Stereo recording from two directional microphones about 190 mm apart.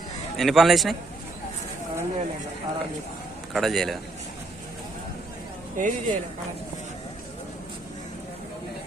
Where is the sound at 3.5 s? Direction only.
Centre (ahead or behind).